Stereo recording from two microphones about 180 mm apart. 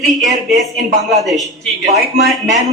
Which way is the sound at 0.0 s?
Centre (ahead or behind).